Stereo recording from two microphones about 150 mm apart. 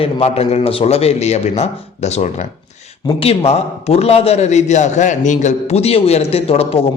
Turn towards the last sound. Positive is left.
turn(degrees=40)  # may be behind; listen again after turning